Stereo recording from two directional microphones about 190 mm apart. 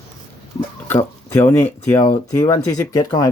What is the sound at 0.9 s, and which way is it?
Speech, 10° left (ahead or behind).